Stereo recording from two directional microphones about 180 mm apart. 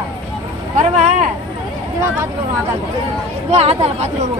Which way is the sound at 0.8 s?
40° right (ahead or behind).